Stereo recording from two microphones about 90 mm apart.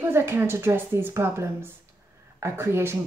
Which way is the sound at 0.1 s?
25° right (ahead or behind).